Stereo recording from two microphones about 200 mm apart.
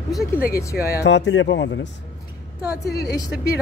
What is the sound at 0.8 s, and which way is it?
Speech, 60° left (ahead or behind).